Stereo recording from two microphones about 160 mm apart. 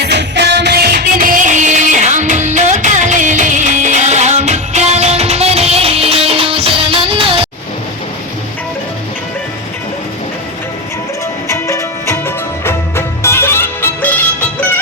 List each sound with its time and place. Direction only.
0.0 s music: 90° right; by 7.4 s 35° right (ahead or behind)
11.4 s music: 20° left (ahead or behind)